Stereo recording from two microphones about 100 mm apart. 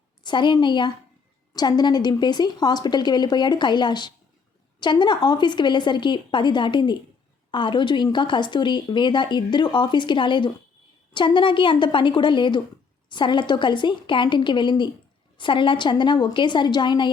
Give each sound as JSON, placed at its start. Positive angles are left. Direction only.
{"t": 0.2, "sound": "speech", "side_deg": 50}